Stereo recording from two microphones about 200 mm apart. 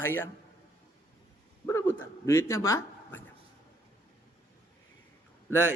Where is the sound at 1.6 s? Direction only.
10° left (ahead or behind).